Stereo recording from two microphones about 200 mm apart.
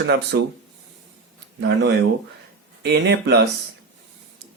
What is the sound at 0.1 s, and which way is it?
Speech, 60° right (ahead or behind).